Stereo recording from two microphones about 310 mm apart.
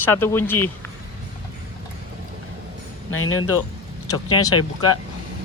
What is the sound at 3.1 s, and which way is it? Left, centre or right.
Speech, left.